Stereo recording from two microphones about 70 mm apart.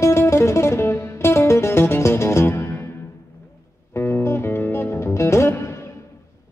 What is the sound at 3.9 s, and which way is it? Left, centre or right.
Music, left.